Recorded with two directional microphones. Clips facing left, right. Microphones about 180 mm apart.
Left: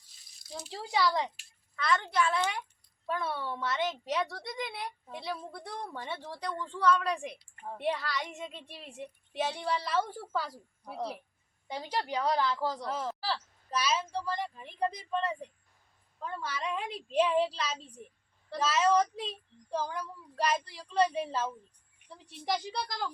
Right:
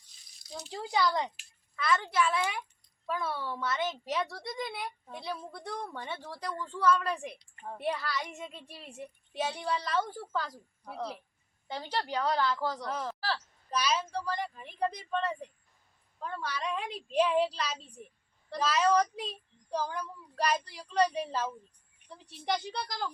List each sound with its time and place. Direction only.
0.3 s a child's voice: centre (ahead or behind)
22.6 s a woman's voice: centre (ahead or behind)